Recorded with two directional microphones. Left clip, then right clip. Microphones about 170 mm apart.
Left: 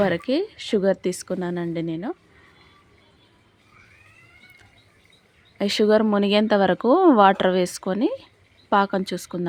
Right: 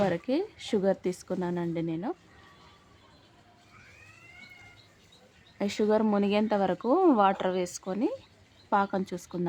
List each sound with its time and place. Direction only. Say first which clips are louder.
0.0 s speech: left 6 dB; 20° left (ahead or behind)
5.5 s speech: left 8 dB; 25° left (ahead or behind)